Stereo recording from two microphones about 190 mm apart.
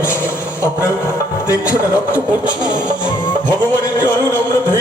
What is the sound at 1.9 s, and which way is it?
Speech, 10° right (ahead or behind).